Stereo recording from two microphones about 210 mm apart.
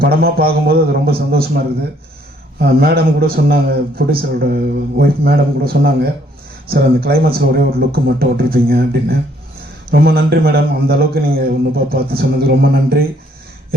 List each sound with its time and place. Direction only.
0.0 s a man's voice: 45° right (ahead or behind)
2.6 s a man's voice: 45° right (ahead or behind)